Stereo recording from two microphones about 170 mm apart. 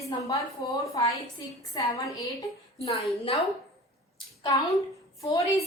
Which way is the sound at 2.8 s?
35° left (ahead or behind).